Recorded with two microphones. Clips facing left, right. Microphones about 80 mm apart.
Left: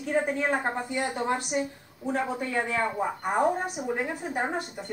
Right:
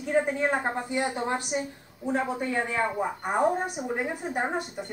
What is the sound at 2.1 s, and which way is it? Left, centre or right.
A woman's voice, centre.